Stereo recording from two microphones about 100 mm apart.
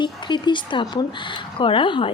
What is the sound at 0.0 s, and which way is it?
Speech, 50° left (ahead or behind).